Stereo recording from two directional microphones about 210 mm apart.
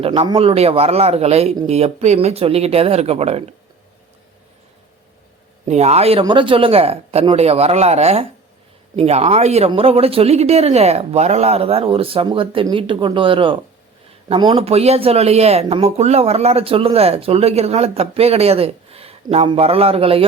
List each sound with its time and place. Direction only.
0.0 s speech: 25° right (ahead or behind)
5.6 s speech: 30° right (ahead or behind)